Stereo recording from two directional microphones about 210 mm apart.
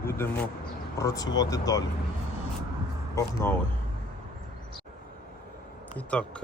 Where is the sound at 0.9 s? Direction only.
15° left (ahead or behind).